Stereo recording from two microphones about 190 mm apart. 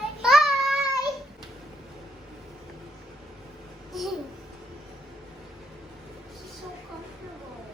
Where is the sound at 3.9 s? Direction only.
Centre (ahead or behind).